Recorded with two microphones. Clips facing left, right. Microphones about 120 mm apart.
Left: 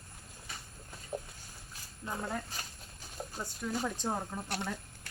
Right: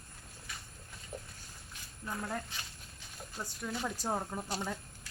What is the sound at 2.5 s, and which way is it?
Speech, 40° left (ahead or behind).